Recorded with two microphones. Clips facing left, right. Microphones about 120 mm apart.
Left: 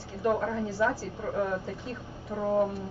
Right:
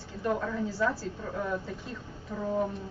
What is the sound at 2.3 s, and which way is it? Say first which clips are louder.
Speech: left 3 dB; 20° left (ahead or behind).